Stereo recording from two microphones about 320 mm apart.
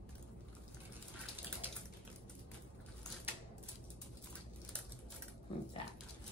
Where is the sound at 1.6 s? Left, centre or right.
Centre.